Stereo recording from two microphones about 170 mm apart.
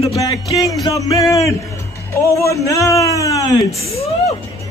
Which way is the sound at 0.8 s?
20° left (ahead or behind).